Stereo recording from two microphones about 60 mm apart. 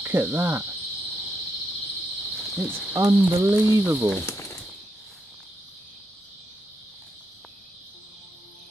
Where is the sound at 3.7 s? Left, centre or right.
Right.